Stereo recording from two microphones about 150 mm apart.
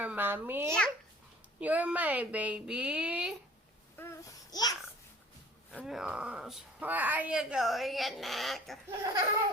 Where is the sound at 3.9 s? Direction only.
15° left (ahead or behind).